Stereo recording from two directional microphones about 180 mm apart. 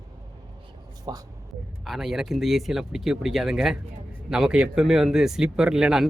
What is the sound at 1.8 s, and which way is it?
Speech, centre (ahead or behind).